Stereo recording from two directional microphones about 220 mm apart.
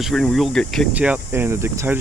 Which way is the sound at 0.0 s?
Centre (ahead or behind).